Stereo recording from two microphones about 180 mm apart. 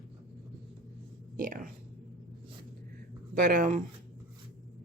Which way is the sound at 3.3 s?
55° right (ahead or behind).